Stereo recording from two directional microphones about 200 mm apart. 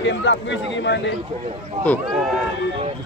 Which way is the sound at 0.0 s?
65° left (ahead or behind).